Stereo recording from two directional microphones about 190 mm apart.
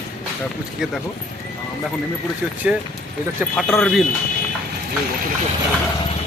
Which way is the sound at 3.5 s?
5° left (ahead or behind).